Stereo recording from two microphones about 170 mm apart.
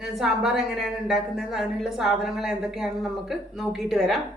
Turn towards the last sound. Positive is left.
turn(degrees=0)  # may be behind; listen again after turning